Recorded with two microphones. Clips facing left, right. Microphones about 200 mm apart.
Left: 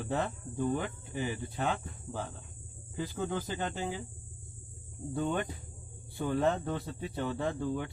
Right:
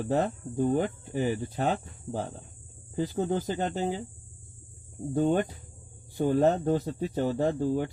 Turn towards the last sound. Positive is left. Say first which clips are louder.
# right 7 dB
turn(degrees=-40)  # may be behind; listen again after turning